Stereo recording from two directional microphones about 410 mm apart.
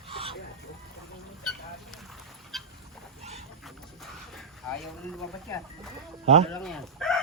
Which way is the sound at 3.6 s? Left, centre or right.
Centre.